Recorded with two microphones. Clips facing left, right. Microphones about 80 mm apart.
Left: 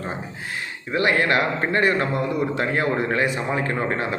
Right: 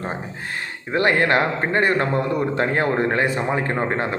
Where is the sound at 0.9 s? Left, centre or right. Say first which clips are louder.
Right 2 dB; right.